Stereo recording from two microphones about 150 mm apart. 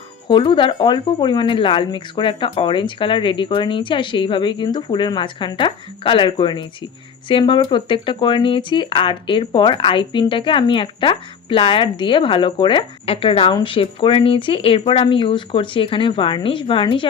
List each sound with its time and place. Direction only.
0.3 s speech: 30° left (ahead or behind)